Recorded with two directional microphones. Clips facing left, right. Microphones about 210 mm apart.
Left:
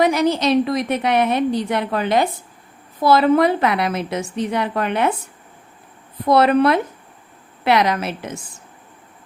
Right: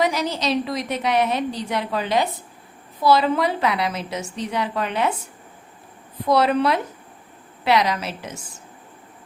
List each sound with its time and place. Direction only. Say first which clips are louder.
0.0 s a woman's voice: left 6 dB; 55° left (ahead or behind)
6.2 s a woman's voice: left 4 dB; 55° left (ahead or behind)